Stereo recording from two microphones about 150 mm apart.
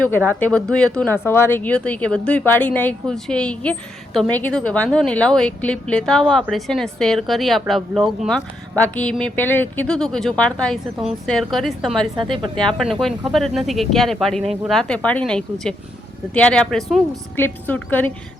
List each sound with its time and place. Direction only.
0.3 s speech: 10° left (ahead or behind)
12.1 s a woman's voice: 35° right (ahead or behind)
12.5 s speech: 5° left (ahead or behind)